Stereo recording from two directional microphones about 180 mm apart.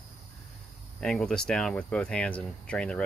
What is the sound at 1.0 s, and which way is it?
Speech, 5° left (ahead or behind).